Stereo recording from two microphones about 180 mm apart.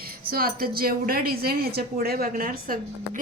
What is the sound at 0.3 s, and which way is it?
A woman's voice, 55° right (ahead or behind).